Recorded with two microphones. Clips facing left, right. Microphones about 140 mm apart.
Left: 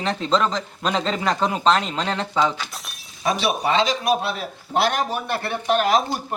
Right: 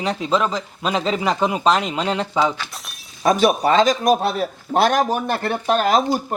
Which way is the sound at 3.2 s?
45° right (ahead or behind).